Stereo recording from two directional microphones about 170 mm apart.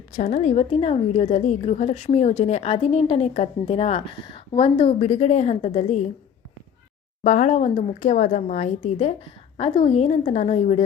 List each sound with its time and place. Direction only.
0.1 s a woman's voice: 45° left (ahead or behind)
7.3 s a woman's voice: 45° left (ahead or behind)